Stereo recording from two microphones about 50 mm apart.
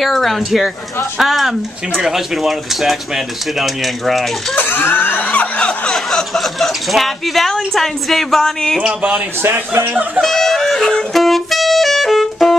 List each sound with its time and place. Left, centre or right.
0.0 s speech: centre
4.6 s speech: left
5.9 s speech: centre
9.4 s a man's voice: right
10.2 s music: centre